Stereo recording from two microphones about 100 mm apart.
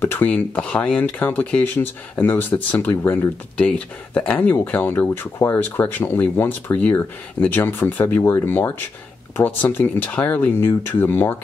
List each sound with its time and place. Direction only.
0.0 s speech: 20° left (ahead or behind)
3.6 s speech: 10° left (ahead or behind)